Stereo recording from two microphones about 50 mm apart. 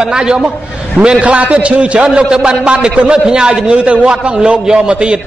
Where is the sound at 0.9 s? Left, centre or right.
Right.